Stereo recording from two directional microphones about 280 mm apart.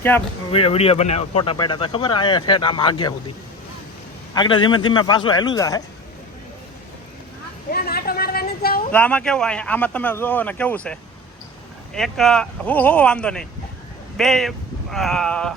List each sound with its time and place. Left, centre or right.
0.1 s speech: centre
0.5 s speech: left
4.4 s speech: centre
7.7 s a sound: left
8.9 s speech: centre
11.9 s speech: centre